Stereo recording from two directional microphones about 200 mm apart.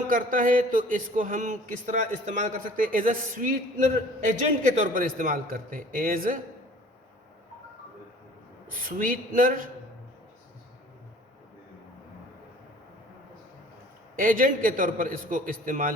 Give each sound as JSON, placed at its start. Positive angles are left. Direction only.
{"t": 0.1, "sound": "a man's voice", "side_deg": -45}
{"t": 8.7, "sound": "a man's voice", "side_deg": -45}
{"t": 14.2, "sound": "a man's voice", "side_deg": -45}